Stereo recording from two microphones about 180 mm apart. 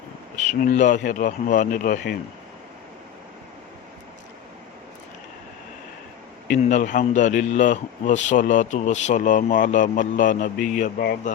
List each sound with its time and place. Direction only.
0.6 s a man's voice: 45° left (ahead or behind)
6.7 s a man's voice: 45° left (ahead or behind)